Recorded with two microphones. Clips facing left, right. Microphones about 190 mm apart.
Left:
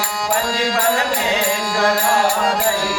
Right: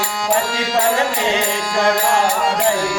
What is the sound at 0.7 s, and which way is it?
Music, 25° right (ahead or behind).